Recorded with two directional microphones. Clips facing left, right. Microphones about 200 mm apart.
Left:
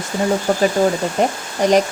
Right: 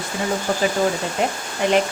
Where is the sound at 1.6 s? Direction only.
40° left (ahead or behind).